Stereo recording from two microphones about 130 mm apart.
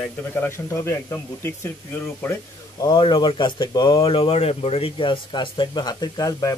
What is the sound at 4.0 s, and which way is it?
Speech, 45° left (ahead or behind).